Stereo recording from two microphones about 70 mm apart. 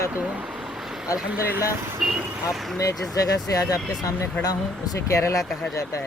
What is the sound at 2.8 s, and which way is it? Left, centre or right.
Speech, left.